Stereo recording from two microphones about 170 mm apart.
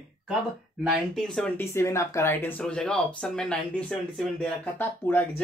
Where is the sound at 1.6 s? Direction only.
15° left (ahead or behind).